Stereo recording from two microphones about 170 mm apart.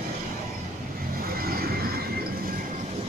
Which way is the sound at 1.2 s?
60° right (ahead or behind).